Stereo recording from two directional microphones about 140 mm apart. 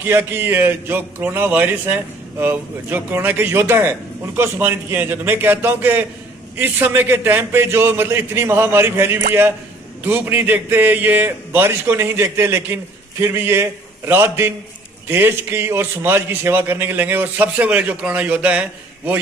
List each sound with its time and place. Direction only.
0.0 s a man's voice: 15° right (ahead or behind)